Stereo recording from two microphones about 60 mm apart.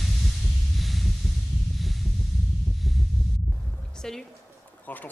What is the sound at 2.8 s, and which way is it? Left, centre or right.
Heart sounds, centre.